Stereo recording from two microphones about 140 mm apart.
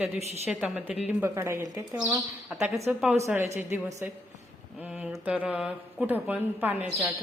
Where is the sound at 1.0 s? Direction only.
15° right (ahead or behind).